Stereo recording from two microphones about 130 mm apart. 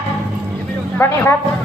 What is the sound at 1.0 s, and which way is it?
Speech, 20° left (ahead or behind).